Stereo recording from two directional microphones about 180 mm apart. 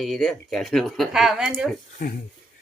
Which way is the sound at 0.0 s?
Centre (ahead or behind).